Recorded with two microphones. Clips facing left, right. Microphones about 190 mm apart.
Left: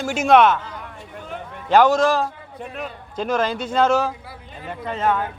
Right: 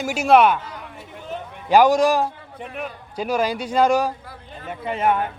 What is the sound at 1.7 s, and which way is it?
Speech, 15° right (ahead or behind).